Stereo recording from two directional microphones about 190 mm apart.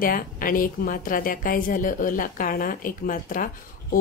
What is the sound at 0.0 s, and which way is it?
A woman's voice, 50° left (ahead or behind).